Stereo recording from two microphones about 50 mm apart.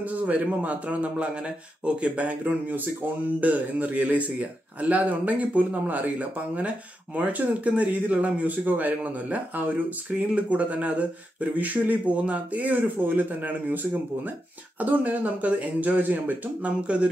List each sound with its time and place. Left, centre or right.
0.0 s speech: right
14.8 s speech: right
16.8 s speech: right